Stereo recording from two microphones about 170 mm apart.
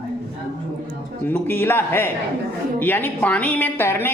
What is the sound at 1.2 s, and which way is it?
A woman's voice, 10° left (ahead or behind).